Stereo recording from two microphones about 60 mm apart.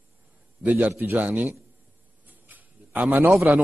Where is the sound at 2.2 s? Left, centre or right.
Right.